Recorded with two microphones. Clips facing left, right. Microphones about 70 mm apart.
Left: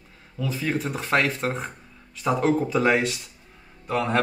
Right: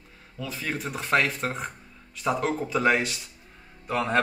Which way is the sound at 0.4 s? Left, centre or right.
Centre.